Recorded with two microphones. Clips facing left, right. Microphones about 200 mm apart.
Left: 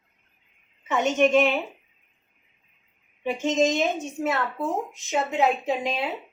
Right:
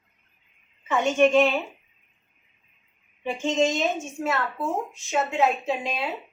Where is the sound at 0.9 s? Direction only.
20° left (ahead or behind).